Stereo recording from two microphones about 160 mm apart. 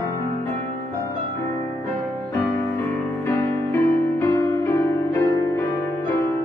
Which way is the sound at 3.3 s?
15° left (ahead or behind).